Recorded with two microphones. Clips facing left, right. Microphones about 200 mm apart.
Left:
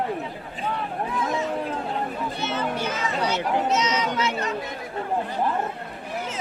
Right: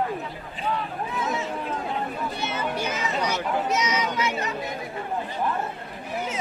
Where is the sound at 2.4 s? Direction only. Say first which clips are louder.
Left 2 dB; 10° right (ahead or behind).